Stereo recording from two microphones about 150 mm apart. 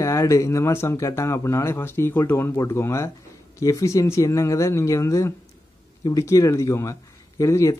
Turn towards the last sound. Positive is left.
turn(degrees=20)  # may be behind; listen again after turning